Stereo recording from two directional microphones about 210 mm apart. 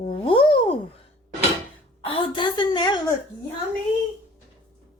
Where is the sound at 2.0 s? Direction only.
25° left (ahead or behind).